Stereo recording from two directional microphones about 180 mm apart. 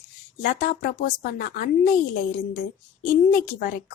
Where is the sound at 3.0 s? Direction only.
45° left (ahead or behind).